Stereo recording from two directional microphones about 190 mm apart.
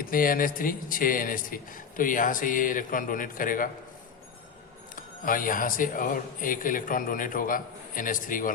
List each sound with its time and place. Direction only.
0.0 s speech: 50° left (ahead or behind)
4.9 s speech: 45° left (ahead or behind)